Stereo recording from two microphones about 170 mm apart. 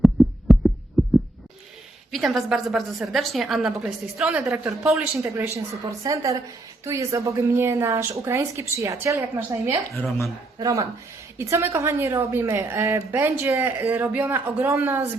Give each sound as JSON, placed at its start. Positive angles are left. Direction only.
{"t": 0.0, "sound": "heart sounds", "side_deg": 0}
{"t": 2.1, "sound": "a woman's voice", "side_deg": 0}
{"t": 9.9, "sound": "speech", "side_deg": 15}
{"t": 10.6, "sound": "a woman's voice", "side_deg": -20}